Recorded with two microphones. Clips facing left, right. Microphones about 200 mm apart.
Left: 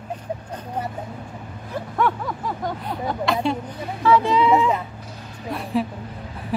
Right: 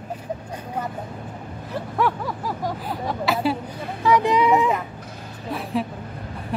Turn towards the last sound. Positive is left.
turn(degrees=0)  # may be behind; listen again after turning